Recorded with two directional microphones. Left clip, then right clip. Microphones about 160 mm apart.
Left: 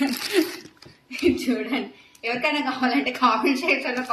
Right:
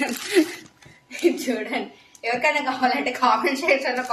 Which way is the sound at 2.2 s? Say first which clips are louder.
Right 3 dB; 25° right (ahead or behind).